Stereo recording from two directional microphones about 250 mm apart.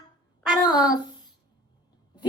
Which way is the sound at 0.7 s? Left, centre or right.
Centre.